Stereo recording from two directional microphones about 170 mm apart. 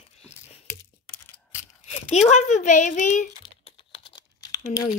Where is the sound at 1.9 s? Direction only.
40° left (ahead or behind).